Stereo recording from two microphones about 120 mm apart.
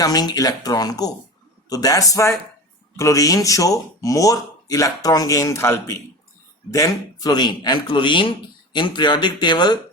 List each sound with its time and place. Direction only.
0.0 s a man's voice: 30° left (ahead or behind)
6.7 s a man's voice: 30° left (ahead or behind)